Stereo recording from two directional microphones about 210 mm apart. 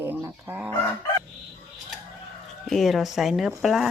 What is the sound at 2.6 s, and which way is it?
Speech, centre (ahead or behind).